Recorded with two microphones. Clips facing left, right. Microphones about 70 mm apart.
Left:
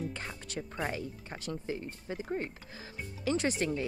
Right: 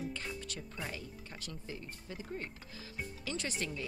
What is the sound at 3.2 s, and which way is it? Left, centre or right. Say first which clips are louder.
Speech: left 10 dB; left.